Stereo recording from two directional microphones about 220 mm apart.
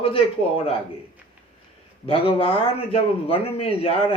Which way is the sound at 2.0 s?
25° left (ahead or behind).